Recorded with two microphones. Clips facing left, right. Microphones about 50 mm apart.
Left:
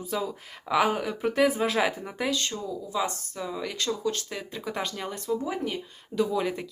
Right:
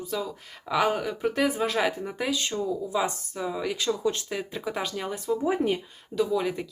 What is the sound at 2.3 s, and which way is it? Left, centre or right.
Speech, centre.